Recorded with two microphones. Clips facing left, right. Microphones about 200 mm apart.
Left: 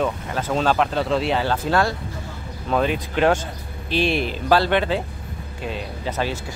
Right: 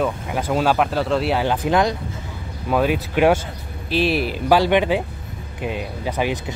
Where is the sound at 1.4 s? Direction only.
15° right (ahead or behind).